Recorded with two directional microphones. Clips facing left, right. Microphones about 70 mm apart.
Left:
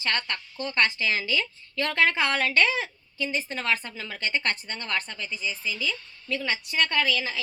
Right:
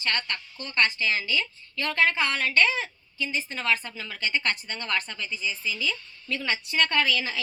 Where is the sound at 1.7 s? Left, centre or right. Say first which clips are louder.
Left 1 dB; left.